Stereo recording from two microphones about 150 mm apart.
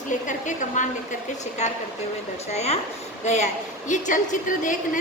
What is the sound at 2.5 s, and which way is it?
A woman's voice, 45° left (ahead or behind).